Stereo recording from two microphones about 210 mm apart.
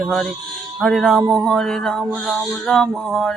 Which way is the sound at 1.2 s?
20° right (ahead or behind).